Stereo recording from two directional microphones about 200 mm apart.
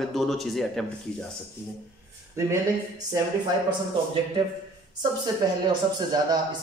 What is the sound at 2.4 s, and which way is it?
Speech, 15° right (ahead or behind).